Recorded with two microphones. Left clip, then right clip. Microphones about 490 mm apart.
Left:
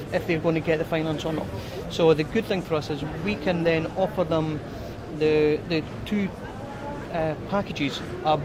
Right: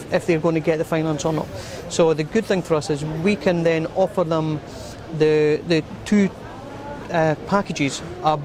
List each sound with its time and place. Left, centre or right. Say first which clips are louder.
0.1 s speech: right 5 dB; right